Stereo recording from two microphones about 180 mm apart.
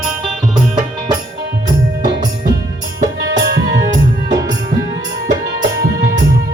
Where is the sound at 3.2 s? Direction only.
70° right (ahead or behind).